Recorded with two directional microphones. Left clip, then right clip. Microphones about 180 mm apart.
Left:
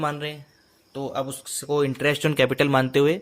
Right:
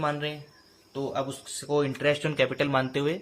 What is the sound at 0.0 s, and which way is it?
Speech, 65° left (ahead or behind).